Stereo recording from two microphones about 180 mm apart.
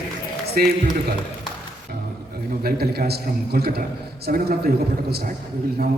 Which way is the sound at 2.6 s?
60° right (ahead or behind).